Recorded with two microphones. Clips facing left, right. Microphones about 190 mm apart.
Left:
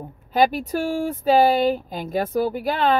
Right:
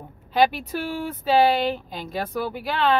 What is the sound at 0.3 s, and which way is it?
A woman's voice, 45° left (ahead or behind).